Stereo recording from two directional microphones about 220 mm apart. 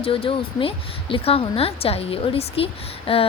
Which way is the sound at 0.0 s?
25° left (ahead or behind).